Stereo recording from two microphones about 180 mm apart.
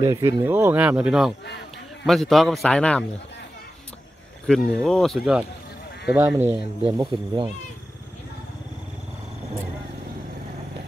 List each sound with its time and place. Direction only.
0.0 s a man's voice: 15° right (ahead or behind); by 3.1 s 5° left (ahead or behind)
4.8 s a man's voice: centre (ahead or behind)
6.0 s speech: 10° right (ahead or behind)
6.8 s speech: 30° right (ahead or behind)